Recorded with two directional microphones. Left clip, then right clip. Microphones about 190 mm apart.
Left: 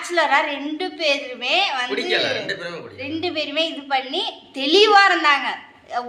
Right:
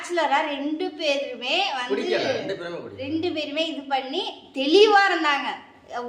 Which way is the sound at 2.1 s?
50° right (ahead or behind).